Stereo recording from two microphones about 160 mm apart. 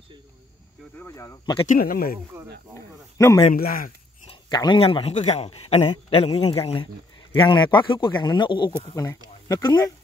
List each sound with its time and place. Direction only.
0.9 s speech: 15° left (ahead or behind)
1.7 s speech: 65° left (ahead or behind)
2.7 s speech: 15° left (ahead or behind)
3.5 s speech: 65° left (ahead or behind)
4.3 s a man's voice: 25° left (ahead or behind)